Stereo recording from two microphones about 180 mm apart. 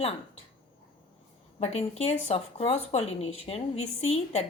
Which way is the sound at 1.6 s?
35° left (ahead or behind).